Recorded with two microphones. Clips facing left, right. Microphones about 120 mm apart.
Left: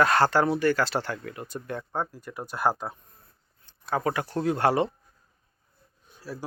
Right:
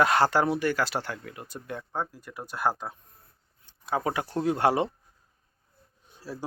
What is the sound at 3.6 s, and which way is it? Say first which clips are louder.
Speech: left 1 dB; 10° right (ahead or behind).